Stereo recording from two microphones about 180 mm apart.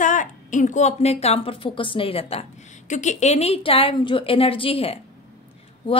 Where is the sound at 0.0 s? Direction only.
45° left (ahead or behind).